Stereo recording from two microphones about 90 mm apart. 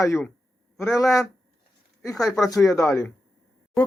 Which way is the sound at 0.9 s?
35° left (ahead or behind).